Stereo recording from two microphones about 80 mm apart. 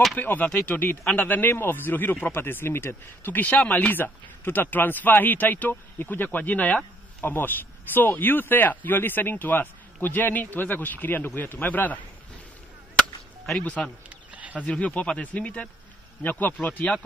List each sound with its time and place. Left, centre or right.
0.1 s speech: left
13.6 s speech: centre
14.0 s a sound: centre
14.6 s speech: centre